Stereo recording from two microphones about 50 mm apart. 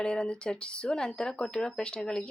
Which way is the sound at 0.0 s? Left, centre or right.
Centre.